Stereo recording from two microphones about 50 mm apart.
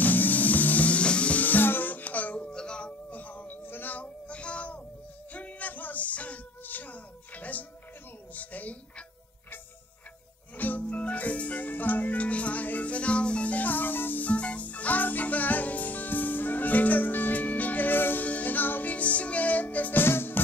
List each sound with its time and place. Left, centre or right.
0.0 s music: left
1.4 s music: left; by 2.9 s centre
3.1 s a sound: left
5.3 s music: left
10.5 s music: left
14.3 s music: left